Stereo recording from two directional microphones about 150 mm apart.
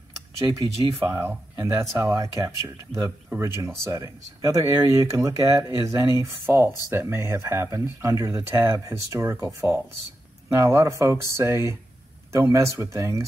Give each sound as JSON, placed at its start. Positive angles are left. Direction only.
{"t": 0.4, "sound": "speech", "side_deg": -25}
{"t": 1.0, "sound": "speech", "side_deg": -15}